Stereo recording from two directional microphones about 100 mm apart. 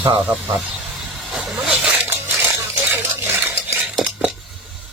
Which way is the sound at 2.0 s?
25° right (ahead or behind).